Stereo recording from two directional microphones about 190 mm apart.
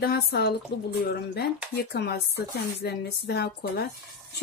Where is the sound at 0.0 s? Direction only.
55° left (ahead or behind).